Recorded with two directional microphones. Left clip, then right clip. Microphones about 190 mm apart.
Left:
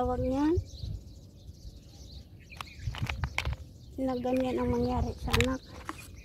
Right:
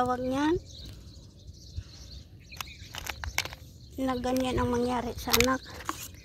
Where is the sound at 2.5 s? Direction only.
60° right (ahead or behind).